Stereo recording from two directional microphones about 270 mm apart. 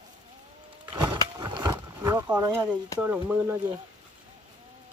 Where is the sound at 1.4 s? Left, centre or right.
Centre.